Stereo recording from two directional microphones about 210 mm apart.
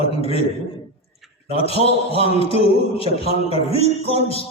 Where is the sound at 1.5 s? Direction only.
30° left (ahead or behind).